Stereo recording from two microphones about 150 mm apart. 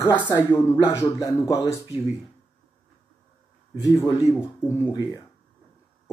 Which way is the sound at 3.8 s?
20° left (ahead or behind).